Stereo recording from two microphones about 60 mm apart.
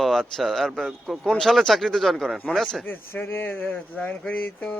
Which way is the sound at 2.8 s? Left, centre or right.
Left.